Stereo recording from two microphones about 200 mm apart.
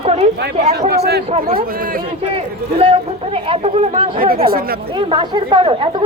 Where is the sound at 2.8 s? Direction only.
25° right (ahead or behind).